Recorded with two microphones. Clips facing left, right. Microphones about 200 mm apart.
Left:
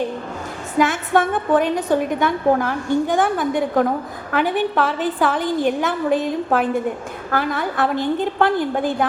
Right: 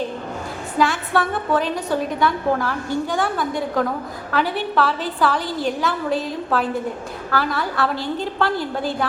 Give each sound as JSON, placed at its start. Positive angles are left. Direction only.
{"t": 0.8, "sound": "a woman's voice", "side_deg": 20}